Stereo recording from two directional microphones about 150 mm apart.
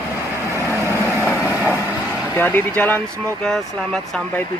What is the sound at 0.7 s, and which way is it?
Vehicle, 15° right (ahead or behind).